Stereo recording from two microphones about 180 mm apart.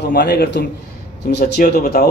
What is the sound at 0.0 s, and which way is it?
A man's voice, 60° left (ahead or behind).